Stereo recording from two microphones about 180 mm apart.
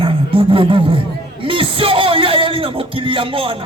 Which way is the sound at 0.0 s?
30° right (ahead or behind).